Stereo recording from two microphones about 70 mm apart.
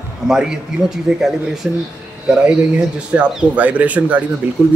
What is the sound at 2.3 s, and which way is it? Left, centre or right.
Speech, centre.